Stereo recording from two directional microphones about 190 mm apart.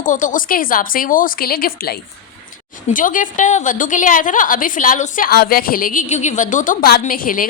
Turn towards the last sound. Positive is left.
turn(degrees=45)  # may be behind; listen again after turning